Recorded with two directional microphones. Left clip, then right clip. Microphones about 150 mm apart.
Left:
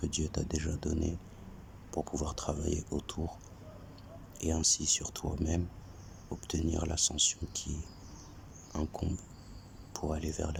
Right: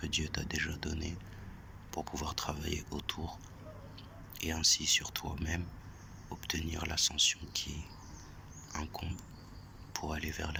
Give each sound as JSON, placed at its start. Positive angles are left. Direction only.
{"t": 0.0, "sound": "speech", "side_deg": 35}
{"t": 4.4, "sound": "speech", "side_deg": 35}